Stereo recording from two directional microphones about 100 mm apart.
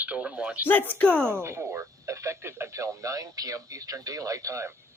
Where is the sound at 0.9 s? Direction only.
10° left (ahead or behind).